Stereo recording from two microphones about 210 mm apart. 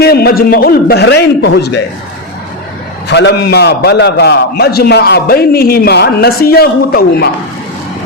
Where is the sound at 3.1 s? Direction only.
55° left (ahead or behind).